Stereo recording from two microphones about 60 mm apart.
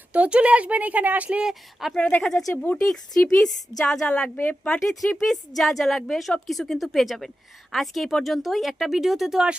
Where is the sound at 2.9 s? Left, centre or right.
Centre.